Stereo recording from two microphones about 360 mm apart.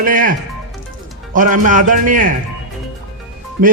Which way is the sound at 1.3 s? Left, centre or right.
Right.